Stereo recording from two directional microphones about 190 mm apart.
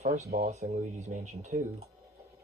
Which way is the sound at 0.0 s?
35° right (ahead or behind).